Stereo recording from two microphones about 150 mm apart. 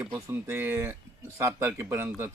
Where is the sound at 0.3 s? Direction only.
15° right (ahead or behind).